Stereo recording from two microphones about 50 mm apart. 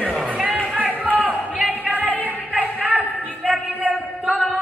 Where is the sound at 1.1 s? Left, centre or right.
Right.